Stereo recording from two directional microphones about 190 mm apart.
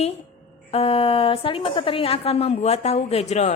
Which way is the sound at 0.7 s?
30° left (ahead or behind).